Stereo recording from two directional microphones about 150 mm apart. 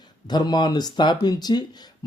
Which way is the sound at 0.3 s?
30° left (ahead or behind).